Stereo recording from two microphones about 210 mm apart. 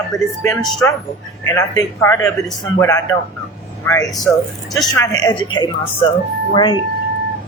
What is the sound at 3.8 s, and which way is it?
Speech, 15° left (ahead or behind).